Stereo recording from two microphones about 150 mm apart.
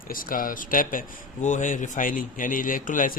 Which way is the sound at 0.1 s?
65° left (ahead or behind).